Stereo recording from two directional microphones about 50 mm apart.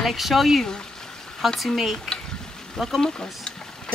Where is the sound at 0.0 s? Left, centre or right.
Centre.